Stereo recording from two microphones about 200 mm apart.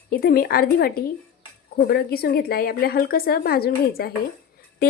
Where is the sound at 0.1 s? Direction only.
50° left (ahead or behind).